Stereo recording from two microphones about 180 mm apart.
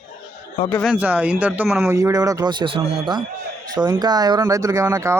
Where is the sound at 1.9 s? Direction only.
20° right (ahead or behind).